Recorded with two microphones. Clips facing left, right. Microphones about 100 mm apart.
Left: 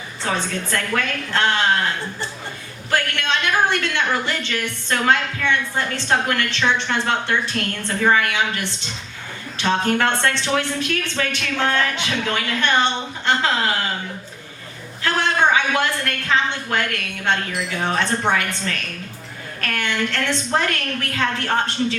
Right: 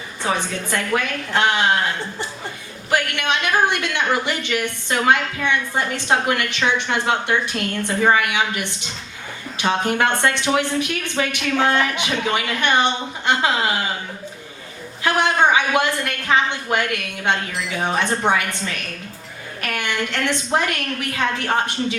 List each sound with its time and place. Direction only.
0.2 s a woman's voice: 15° right (ahead or behind)
2.9 s a woman's voice: 15° right (ahead or behind)
15.0 s a woman's voice: 15° right (ahead or behind)